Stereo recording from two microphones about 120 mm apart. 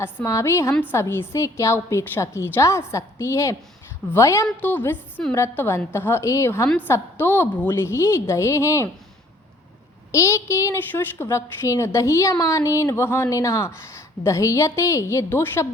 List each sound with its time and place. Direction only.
0.0 s a woman's voice: 25° left (ahead or behind)
10.1 s a woman's voice: 25° left (ahead or behind)